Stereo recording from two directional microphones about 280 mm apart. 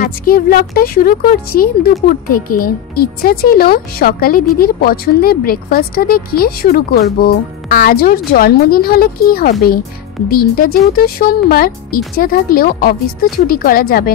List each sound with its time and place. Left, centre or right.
0.0 s speech: left